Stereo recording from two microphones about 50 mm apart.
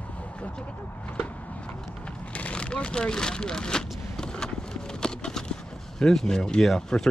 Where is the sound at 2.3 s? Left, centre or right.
Left.